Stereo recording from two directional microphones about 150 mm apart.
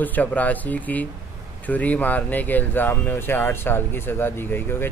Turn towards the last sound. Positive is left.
turn(degrees=15)  # may be behind; listen again after turning